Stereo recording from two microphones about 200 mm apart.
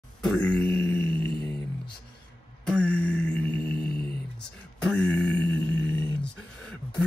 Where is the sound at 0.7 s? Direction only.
10° left (ahead or behind).